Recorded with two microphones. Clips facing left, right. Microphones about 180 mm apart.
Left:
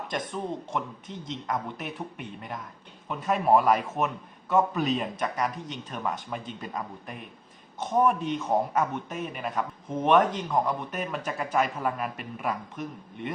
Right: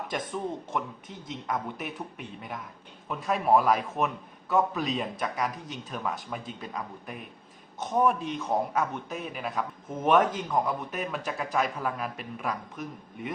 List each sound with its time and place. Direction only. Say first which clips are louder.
0.7 s a man's voice: left 1 dB; 5° right (ahead or behind)